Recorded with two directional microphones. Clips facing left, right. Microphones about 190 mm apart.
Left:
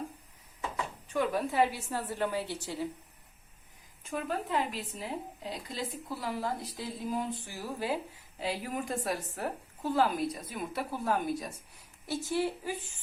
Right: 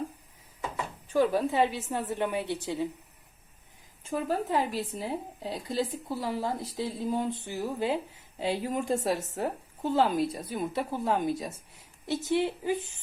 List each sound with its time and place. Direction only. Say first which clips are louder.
1.1 s a woman's voice: right 5 dB; 25° right (ahead or behind)
4.0 s a woman's voice: right 5 dB; 35° right (ahead or behind)